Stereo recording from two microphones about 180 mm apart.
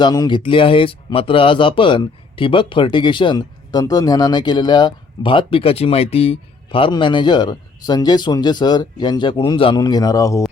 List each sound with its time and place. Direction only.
0.0 s speech: 20° left (ahead or behind)